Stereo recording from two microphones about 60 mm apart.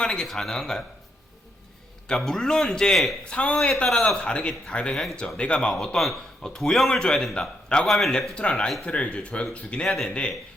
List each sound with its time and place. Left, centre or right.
0.0 s speech: centre
2.0 s speech: centre
3.2 s speech: centre
6.0 s a man's voice: centre
7.9 s speech: centre
8.4 s speech: centre
9.8 s speech: centre